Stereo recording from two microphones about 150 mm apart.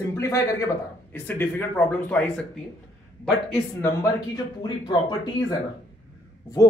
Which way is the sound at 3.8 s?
25° left (ahead or behind).